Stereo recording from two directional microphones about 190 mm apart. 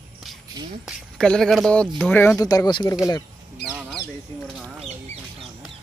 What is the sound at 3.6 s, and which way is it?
Duck, 5° right (ahead or behind).